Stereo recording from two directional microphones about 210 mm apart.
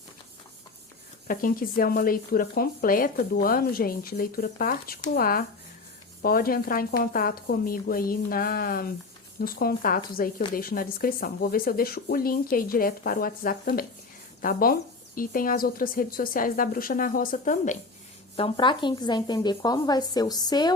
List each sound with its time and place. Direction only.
1.3 s speech: 45° left (ahead or behind)
18.3 s a woman's voice: 25° left (ahead or behind)